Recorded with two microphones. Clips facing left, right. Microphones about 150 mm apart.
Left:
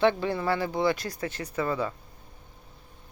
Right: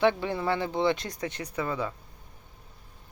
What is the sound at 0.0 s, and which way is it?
Speech, 15° right (ahead or behind).